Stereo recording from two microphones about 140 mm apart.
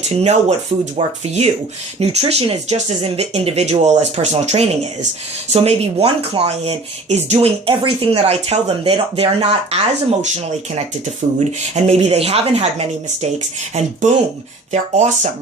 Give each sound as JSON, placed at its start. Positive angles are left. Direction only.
{"t": 0.2, "sound": "speech", "side_deg": -50}
{"t": 14.7, "sound": "speech", "side_deg": -55}